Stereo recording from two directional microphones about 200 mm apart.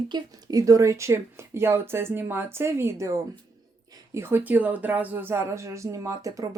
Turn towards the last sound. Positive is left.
turn(degrees=-15)  # may be behind; listen again after turning